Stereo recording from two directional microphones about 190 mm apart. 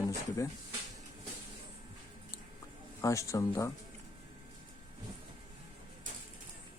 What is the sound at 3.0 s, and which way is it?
Speech, 15° left (ahead or behind).